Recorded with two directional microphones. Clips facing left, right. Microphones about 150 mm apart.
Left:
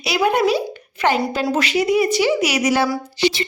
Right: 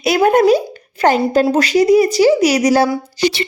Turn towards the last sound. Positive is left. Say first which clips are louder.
# right 3 dB
turn(degrees=-40)  # may be behind; listen again after turning